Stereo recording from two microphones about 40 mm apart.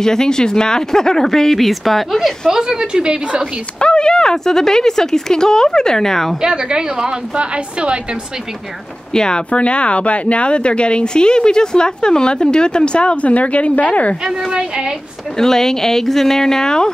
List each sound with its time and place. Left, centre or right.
0.0 s speech: centre
2.5 s a woman's voice: centre
3.8 s speech: left
6.4 s a woman's voice: centre
9.1 s speech: centre
9.5 s speech: left
14.2 s a woman's voice: centre
15.3 s speech: centre